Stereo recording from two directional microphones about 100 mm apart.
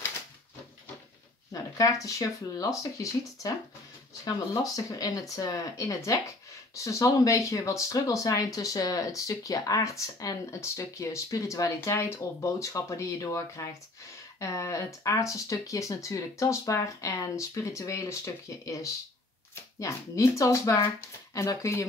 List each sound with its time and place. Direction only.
1.5 s speech: 35° left (ahead or behind)
4.7 s speech: 35° left (ahead or behind)